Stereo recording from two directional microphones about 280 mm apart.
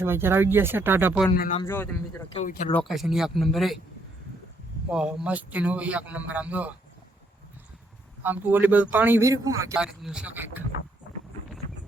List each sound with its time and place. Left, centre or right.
0.0 s a man's voice: centre
1.4 s speech: left
1.6 s a man's voice: centre
2.3 s speech: left
2.8 s a man's voice: centre
4.9 s a man's voice: centre
8.2 s a man's voice: centre